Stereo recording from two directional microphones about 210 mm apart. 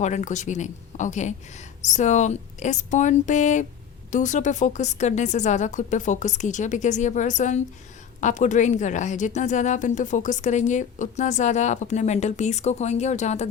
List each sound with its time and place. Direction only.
0.0 s a woman's voice: 35° left (ahead or behind)